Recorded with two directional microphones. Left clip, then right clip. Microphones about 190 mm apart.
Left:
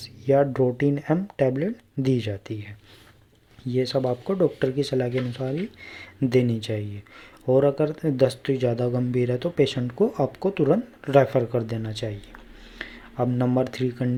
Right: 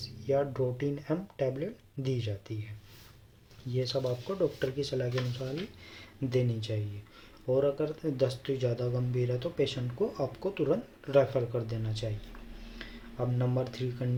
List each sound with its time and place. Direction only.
0.3 s speech: 45° left (ahead or behind)
3.7 s speech: 40° left (ahead or behind)